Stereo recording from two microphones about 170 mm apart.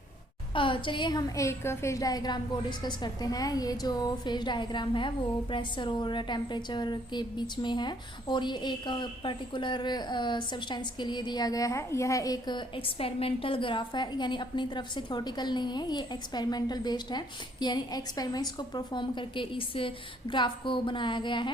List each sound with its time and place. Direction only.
0.5 s a woman's voice: 30° left (ahead or behind)